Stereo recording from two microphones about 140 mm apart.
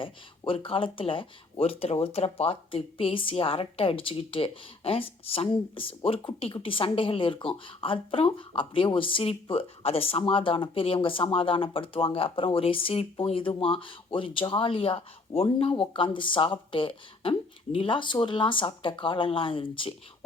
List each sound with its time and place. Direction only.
0.0 s speech: 40° left (ahead or behind)